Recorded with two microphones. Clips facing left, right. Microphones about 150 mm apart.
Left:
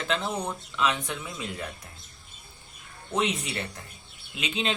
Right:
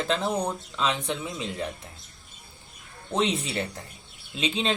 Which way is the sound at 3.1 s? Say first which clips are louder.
Right 2 dB; 30° right (ahead or behind).